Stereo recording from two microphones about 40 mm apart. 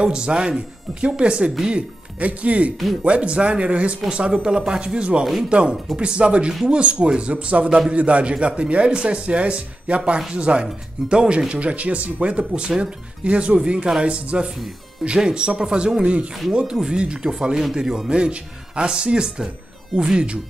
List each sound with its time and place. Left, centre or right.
0.0 s speech: right
2.2 s speech: right
11.7 s speech: right
12.3 s speech: right; by 18.1 s centre
18.1 s speech: right